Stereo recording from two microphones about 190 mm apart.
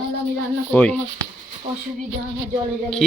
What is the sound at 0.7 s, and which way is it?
Speech, 5° left (ahead or behind).